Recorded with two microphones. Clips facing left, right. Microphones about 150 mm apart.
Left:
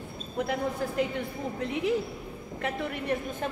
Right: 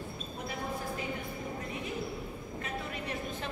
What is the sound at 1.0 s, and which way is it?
Speech, 80° left.